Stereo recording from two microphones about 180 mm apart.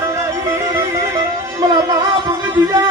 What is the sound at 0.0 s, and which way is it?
Music, 20° right (ahead or behind).